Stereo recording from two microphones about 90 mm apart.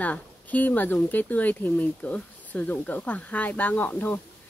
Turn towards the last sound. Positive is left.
turn(degrees=20)  # may be behind; listen again after turning